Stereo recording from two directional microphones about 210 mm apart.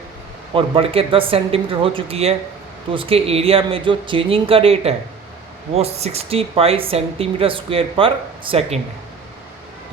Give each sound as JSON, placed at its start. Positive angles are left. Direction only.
{"t": 0.5, "sound": "speech", "side_deg": -25}